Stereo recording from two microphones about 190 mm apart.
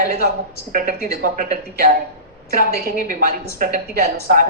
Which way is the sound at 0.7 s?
45° right (ahead or behind).